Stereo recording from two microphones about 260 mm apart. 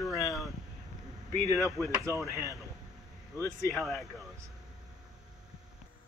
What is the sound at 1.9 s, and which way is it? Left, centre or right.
Speech, centre.